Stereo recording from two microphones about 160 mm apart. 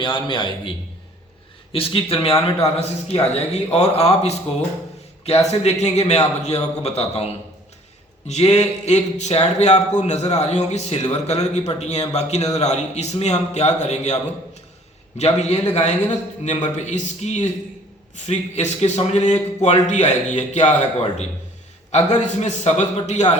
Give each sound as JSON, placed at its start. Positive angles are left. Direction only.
{"t": 0.0, "sound": "speech", "side_deg": 30}
{"t": 8.3, "sound": "speech", "side_deg": 40}
{"t": 15.2, "sound": "speech", "side_deg": 40}